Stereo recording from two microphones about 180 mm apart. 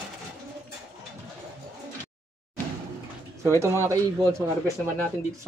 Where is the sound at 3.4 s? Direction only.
15° right (ahead or behind).